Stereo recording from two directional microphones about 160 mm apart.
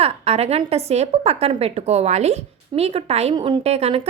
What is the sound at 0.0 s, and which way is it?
A woman's voice, 40° right (ahead or behind).